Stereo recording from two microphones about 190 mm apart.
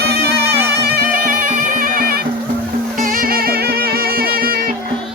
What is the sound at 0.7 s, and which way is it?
Bagpipes, 55° right (ahead or behind).